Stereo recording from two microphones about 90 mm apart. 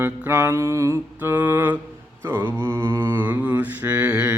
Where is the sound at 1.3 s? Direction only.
20° right (ahead or behind).